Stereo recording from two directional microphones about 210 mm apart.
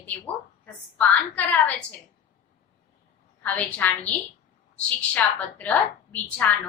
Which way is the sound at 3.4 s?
5° left (ahead or behind).